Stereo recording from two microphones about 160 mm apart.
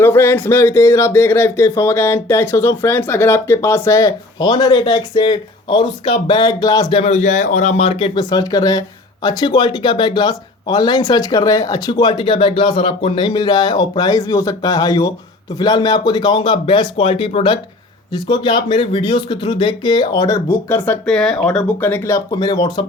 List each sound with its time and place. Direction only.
0.0 s speech: 15° left (ahead or behind)
6.9 s speech: 40° left (ahead or behind); by 22.8 s 25° left (ahead or behind)